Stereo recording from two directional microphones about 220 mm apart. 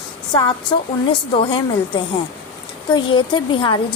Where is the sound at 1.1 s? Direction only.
20° left (ahead or behind).